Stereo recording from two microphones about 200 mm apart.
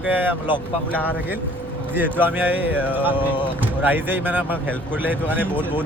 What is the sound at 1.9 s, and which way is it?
Speech, 10° right (ahead or behind).